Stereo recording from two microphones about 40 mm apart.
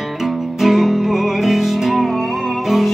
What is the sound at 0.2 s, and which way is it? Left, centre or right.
Music, centre.